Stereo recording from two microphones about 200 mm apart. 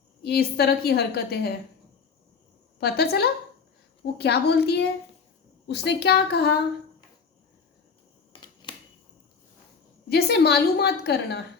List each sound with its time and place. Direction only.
0.2 s a woman's voice: 50° left (ahead or behind)
2.8 s a woman's voice: 50° left (ahead or behind)
8.3 s camera: 25° left (ahead or behind)
10.1 s a woman's voice: 55° left (ahead or behind)